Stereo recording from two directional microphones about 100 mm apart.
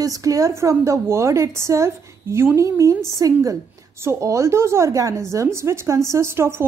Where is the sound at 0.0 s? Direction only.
35° right (ahead or behind).